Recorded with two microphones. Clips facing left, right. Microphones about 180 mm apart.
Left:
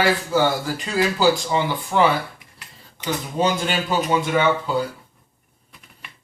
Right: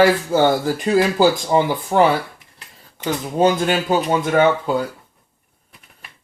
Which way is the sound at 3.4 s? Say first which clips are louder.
Right 6 dB; 50° right (ahead or behind).